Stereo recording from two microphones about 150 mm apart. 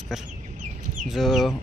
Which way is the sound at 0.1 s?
5° right (ahead or behind).